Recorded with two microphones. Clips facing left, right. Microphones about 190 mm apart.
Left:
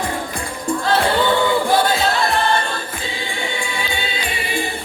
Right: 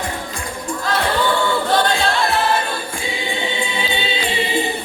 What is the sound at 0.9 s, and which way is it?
Music, 30° left (ahead or behind).